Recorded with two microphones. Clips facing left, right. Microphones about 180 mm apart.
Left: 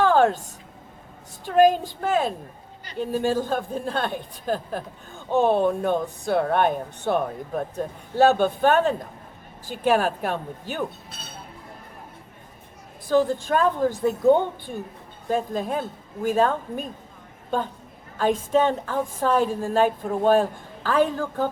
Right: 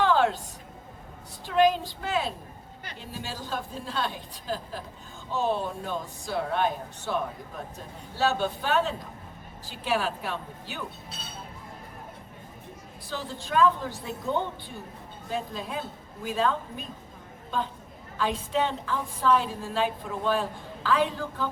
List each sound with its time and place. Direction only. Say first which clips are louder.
0.0 s a sound: left 5 dB; 50° left (ahead or behind)
1.5 s a woman's voice: left 5 dB; 50° left (ahead or behind)
13.1 s a woman's voice: left 14 dB; 50° left (ahead or behind)